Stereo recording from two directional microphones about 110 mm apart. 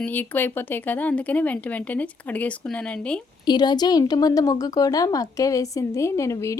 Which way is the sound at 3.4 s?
40° left (ahead or behind).